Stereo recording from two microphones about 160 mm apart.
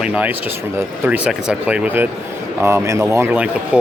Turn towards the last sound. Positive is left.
turn(degrees=-5)  # may be behind; listen again after turning